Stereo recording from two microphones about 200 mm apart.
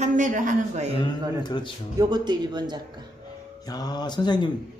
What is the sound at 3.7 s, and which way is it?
Speech, 20° left (ahead or behind).